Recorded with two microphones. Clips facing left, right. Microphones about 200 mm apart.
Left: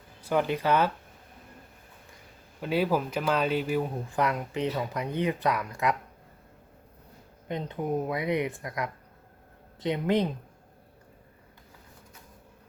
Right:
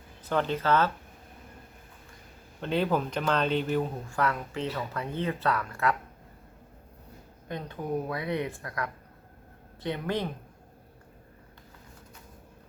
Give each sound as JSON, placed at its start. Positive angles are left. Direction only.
{"t": 0.2, "sound": "speech", "side_deg": 10}
{"t": 2.6, "sound": "speech", "side_deg": 5}
{"t": 7.4, "sound": "speech", "side_deg": 20}